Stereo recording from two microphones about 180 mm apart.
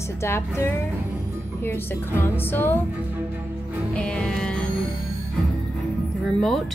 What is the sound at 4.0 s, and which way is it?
Music, 5° left (ahead or behind).